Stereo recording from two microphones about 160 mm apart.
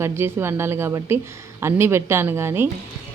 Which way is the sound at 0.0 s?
15° right (ahead or behind).